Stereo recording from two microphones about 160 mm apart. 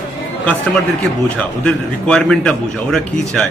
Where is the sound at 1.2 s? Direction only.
5° left (ahead or behind).